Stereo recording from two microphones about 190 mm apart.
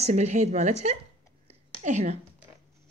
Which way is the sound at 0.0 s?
35° right (ahead or behind).